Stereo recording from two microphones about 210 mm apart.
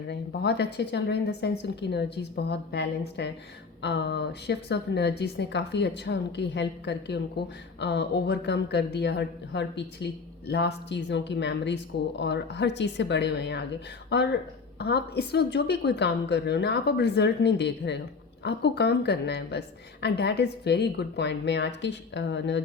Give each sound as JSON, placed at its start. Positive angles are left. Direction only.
{"t": 0.1, "sound": "a woman's voice", "side_deg": 55}